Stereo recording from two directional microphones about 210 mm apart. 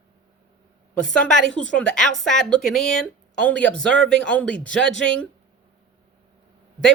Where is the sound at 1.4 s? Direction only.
65° right (ahead or behind).